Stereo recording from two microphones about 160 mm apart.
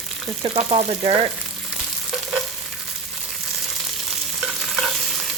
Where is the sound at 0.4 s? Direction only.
35° right (ahead or behind).